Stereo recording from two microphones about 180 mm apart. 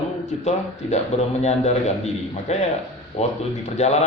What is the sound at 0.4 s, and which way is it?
A man's voice, 40° left (ahead or behind).